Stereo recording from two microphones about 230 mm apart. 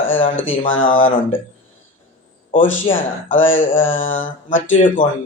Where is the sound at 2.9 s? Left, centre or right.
Left.